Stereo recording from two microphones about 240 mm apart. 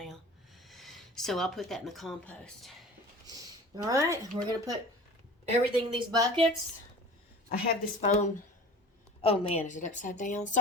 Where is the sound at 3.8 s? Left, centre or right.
Centre.